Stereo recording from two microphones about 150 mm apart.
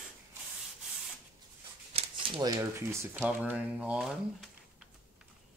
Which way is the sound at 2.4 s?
25° right (ahead or behind).